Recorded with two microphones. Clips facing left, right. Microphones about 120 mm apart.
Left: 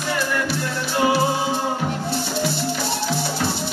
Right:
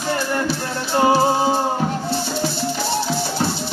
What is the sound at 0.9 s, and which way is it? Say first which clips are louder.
Music: right 4 dB; 35° right (ahead or behind).